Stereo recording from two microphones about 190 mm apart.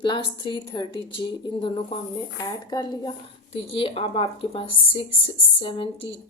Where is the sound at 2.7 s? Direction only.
20° left (ahead or behind).